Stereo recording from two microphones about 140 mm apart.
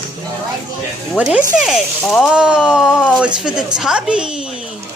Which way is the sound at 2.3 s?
5° right (ahead or behind).